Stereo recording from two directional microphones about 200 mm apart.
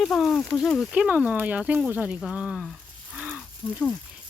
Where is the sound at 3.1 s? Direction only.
5° right (ahead or behind).